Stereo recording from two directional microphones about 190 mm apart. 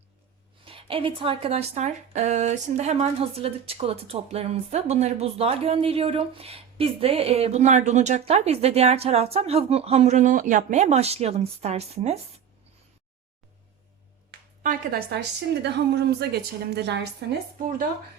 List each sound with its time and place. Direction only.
0.6 s speech: 30° right (ahead or behind)
14.6 s a woman's voice: 50° right (ahead or behind)
17.6 s speech: 45° right (ahead or behind)